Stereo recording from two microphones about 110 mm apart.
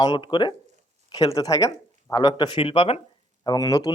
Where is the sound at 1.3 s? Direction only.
30° left (ahead or behind); by 2.9 s 55° left (ahead or behind).